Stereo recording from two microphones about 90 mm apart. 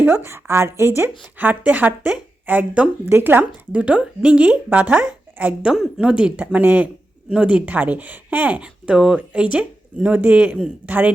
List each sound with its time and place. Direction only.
0.3 s speech: 30° right (ahead or behind)
1.2 s a man's voice: 15° right (ahead or behind)